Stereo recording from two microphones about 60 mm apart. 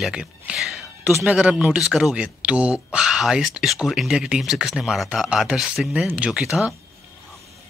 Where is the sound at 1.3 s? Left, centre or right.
Right.